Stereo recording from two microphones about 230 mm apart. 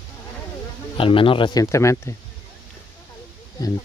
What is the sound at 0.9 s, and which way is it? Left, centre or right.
Speech, left.